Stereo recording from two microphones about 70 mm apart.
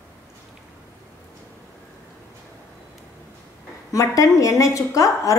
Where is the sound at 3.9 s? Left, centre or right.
Left.